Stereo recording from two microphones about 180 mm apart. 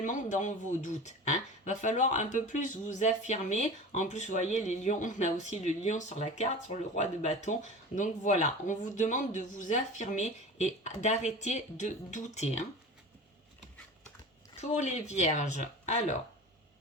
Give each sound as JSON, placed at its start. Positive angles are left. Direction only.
{"t": 0.0, "sound": "speech", "side_deg": 45}
{"t": 14.6, "sound": "speech", "side_deg": 40}